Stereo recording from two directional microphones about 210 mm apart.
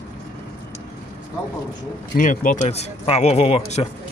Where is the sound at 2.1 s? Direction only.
40° left (ahead or behind).